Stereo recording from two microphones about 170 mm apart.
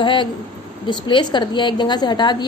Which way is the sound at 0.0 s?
30° left (ahead or behind).